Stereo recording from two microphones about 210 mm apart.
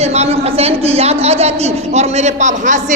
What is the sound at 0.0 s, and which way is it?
A woman's voice, 30° right (ahead or behind).